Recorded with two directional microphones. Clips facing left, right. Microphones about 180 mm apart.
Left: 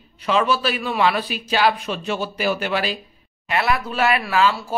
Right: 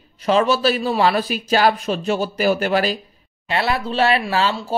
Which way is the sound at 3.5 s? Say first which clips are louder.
Right 1 dB; 30° right (ahead or behind).